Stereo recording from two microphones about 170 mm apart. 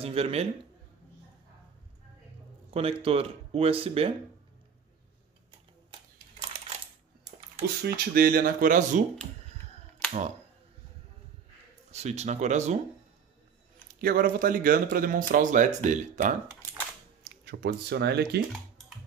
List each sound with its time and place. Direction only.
0.0 s speech: 35° right (ahead or behind)
2.7 s speech: 35° right (ahead or behind)
7.8 s speech: 65° right (ahead or behind)
11.9 s speech: 40° right (ahead or behind)
14.0 s speech: 55° right (ahead or behind)
17.5 s speech: 75° right (ahead or behind)